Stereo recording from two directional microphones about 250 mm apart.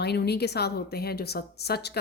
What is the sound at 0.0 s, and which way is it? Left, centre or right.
Speech, left.